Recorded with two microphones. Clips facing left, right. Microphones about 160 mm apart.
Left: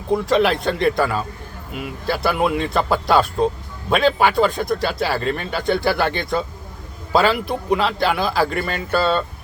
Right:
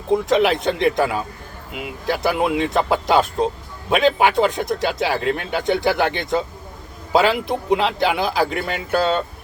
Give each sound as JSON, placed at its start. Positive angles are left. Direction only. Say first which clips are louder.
{"t": 0.1, "sound": "speech", "louder": "right 1 dB", "side_deg": -20}